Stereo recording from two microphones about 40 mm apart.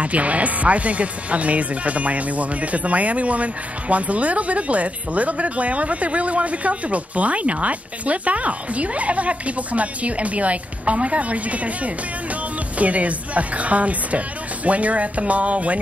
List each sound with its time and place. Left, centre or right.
0.0 s speech: right